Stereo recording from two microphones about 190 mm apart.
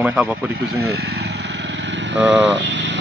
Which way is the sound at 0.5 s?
55° right (ahead or behind).